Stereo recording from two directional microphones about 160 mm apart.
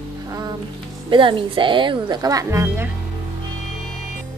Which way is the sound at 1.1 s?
30° right (ahead or behind).